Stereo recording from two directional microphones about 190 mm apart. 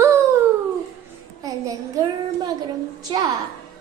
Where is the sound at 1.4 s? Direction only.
20° right (ahead or behind).